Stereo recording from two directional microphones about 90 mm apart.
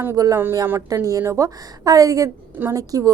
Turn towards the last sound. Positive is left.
turn(degrees=-40)  # may be behind; listen again after turning